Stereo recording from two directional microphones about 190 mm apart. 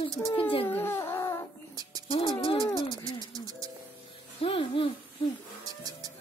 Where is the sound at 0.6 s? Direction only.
10° left (ahead or behind).